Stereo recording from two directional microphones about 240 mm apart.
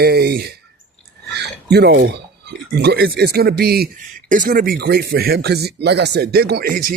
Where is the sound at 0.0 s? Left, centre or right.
Right.